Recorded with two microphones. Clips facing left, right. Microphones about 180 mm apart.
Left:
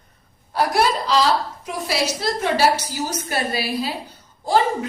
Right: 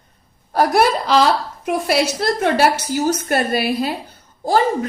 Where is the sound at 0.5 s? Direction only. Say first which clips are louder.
Right 4 dB; 55° right (ahead or behind).